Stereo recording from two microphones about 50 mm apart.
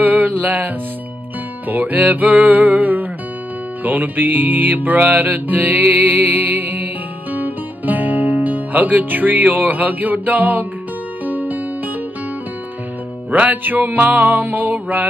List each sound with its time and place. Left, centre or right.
0.0 s music: right
1.7 s music: right
13.3 s music: right